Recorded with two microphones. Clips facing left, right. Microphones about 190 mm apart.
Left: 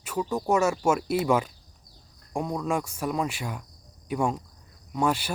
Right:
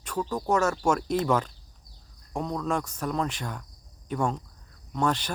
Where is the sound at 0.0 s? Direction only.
5° left (ahead or behind).